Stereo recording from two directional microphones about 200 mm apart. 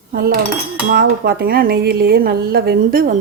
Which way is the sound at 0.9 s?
50° right (ahead or behind).